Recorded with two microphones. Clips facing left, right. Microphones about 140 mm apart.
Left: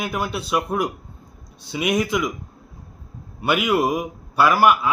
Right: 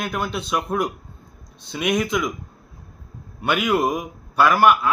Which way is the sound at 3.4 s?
5° left (ahead or behind).